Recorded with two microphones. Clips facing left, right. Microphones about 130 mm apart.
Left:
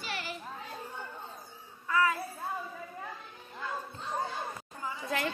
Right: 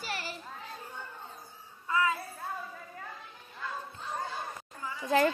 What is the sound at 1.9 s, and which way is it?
Child singing, 25° right (ahead or behind).